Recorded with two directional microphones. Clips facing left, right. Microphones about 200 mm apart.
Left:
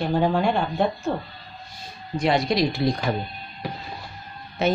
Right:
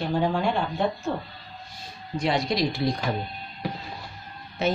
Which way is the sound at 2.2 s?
65° left (ahead or behind).